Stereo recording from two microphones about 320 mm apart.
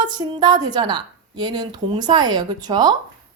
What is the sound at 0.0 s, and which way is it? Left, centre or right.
A woman's voice, centre.